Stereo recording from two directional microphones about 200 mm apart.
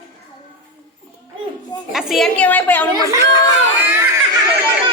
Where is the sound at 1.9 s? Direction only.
Centre (ahead or behind).